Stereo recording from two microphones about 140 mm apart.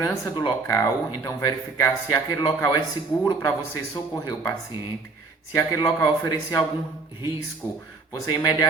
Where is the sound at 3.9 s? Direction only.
30° left (ahead or behind).